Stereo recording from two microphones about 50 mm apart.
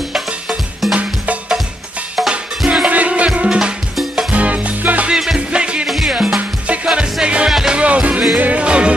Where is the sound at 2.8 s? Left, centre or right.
Right.